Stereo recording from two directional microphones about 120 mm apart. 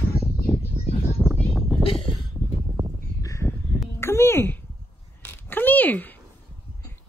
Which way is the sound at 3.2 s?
25° left (ahead or behind).